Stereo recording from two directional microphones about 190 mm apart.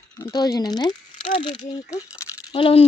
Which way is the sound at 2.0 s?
15° left (ahead or behind).